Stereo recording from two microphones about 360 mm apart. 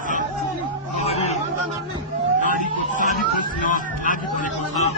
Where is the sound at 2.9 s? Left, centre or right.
Left.